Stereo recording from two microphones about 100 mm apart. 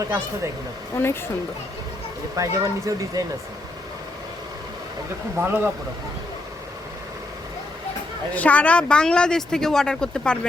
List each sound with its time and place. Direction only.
0.0 s speech: 30° right (ahead or behind)
2.3 s speech: 30° right (ahead or behind)
5.4 s speech: 20° right (ahead or behind)
8.4 s speech: 15° left (ahead or behind)